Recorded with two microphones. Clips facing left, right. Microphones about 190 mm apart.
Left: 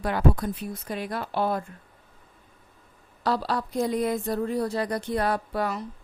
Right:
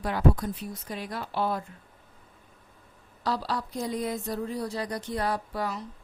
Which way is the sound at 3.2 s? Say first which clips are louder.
Left 4 dB; 60° left (ahead or behind).